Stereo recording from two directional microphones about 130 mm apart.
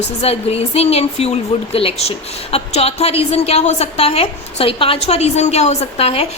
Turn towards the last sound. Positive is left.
turn(degrees=50)  # may be behind; listen again after turning